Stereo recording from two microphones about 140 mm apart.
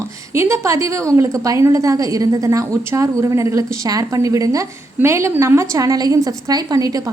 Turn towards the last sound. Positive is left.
turn(degrees=-25)  # may be behind; listen again after turning